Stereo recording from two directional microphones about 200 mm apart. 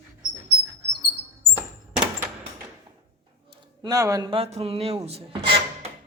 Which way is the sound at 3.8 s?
15° right (ahead or behind).